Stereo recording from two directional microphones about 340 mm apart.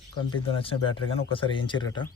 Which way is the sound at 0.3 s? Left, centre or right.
Centre.